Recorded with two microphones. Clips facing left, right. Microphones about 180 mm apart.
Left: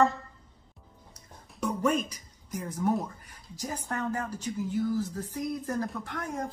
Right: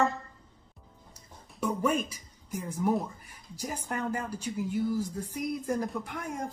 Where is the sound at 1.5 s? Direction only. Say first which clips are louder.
Left 1 dB; 5° right (ahead or behind).